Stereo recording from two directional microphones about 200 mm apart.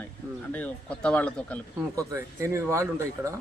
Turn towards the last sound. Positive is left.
turn(degrees=-15)  # may be behind; listen again after turning